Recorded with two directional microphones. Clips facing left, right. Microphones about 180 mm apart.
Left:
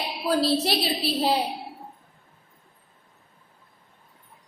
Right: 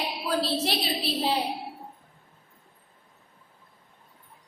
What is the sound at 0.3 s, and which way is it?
Speech, 40° left (ahead or behind).